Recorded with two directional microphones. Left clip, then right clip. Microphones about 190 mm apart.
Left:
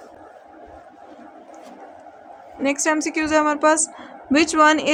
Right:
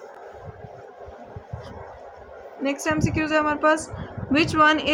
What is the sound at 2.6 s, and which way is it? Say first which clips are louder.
Speech: left 4 dB; 40° left (ahead or behind).